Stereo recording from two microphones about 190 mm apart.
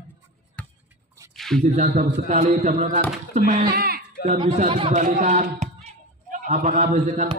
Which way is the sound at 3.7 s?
55° right (ahead or behind).